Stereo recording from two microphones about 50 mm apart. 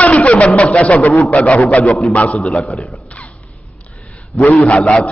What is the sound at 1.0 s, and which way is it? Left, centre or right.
Speech, left.